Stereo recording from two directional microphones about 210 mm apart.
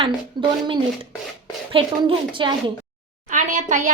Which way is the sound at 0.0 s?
20° right (ahead or behind).